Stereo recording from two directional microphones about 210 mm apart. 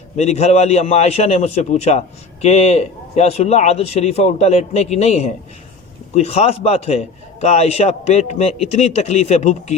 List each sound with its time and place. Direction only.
0.2 s a man's voice: 30° left (ahead or behind)